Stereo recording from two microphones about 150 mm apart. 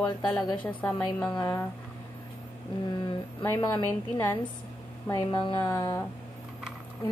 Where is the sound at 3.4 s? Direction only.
15° left (ahead or behind).